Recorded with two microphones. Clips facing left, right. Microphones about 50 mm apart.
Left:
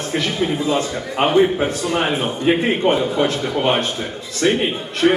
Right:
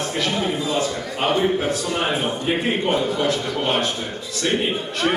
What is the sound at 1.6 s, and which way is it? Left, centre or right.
A man's voice, left.